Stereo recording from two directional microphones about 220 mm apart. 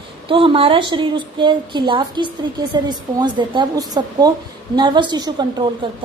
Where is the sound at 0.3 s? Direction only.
25° right (ahead or behind).